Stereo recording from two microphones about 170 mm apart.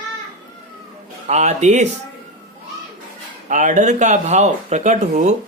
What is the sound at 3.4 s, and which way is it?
Speech, 45° right (ahead or behind).